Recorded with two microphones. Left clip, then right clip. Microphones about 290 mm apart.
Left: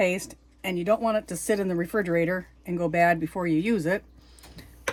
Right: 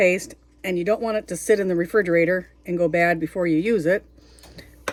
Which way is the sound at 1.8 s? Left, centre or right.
Left.